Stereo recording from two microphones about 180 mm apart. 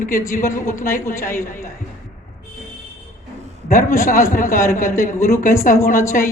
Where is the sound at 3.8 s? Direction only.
15° left (ahead or behind).